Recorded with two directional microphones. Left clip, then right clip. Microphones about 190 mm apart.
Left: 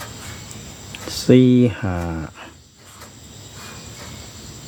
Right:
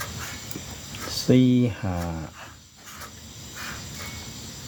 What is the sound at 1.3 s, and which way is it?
Speech, 35° left (ahead or behind).